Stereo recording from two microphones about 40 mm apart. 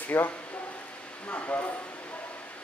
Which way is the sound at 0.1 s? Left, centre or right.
Left.